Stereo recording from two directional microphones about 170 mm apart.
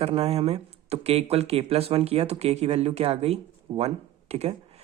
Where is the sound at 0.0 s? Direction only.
35° right (ahead or behind).